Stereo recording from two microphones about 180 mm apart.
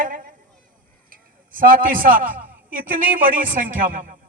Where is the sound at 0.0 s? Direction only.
50° right (ahead or behind).